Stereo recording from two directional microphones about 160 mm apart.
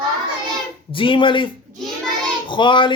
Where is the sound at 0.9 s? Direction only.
30° left (ahead or behind).